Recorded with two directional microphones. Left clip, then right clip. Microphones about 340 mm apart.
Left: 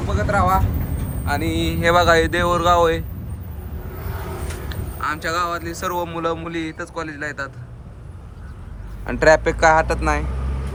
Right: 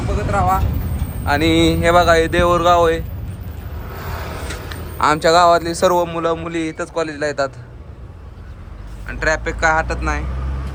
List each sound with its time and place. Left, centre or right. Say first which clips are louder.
0.3 s speech: right 1 dB; centre
1.2 s speech: right 8 dB; right
1.7 s speech: left 1 dB; centre
4.1 s vehicle: right 3 dB; right
4.9 s speech: right 10 dB; centre
9.0 s speech: left 5 dB; centre